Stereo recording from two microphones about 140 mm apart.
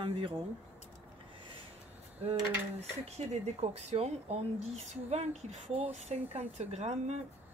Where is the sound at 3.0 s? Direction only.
50° right (ahead or behind).